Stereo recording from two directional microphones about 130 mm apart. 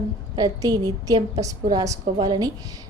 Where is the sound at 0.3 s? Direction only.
30° right (ahead or behind).